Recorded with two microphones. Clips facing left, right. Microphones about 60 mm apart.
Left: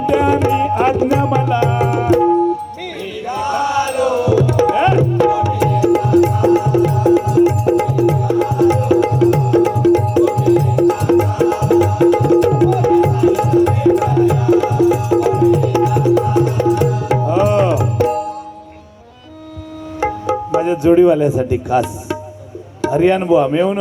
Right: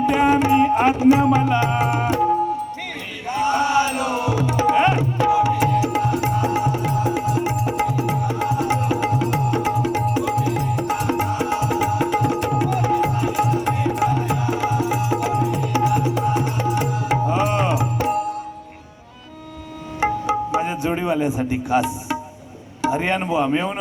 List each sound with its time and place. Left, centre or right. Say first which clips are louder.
0.0 s music: left 3 dB; right
3.2 s tabla: left 1 dB; right
5.6 s music: left 5 dB; centre
20.0 s music: left 2 dB; right
22.8 s speech: left 7 dB; right